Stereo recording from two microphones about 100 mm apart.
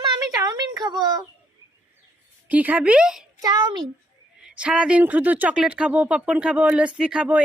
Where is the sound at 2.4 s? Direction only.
15° right (ahead or behind).